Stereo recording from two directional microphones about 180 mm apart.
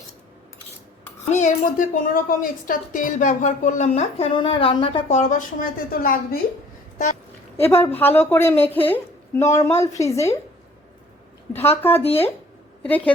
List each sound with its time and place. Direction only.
1.3 s a woman's voice: 45° left (ahead or behind)
7.5 s a woman's voice: 15° left (ahead or behind)
11.8 s a woman's voice: 10° left (ahead or behind)